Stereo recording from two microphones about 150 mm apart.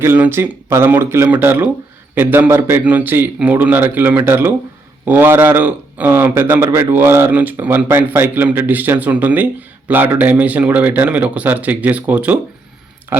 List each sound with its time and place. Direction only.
0.0 s speech: 15° right (ahead or behind)